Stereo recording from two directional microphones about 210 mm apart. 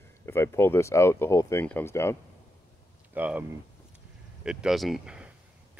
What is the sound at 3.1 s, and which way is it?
Speech, 5° right (ahead or behind).